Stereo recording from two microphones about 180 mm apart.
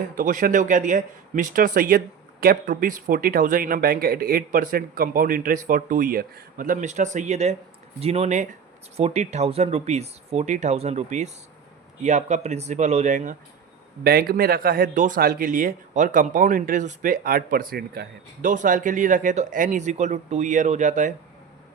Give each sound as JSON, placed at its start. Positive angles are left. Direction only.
{"t": 0.2, "sound": "speech", "side_deg": -50}
{"t": 14.0, "sound": "speech", "side_deg": -55}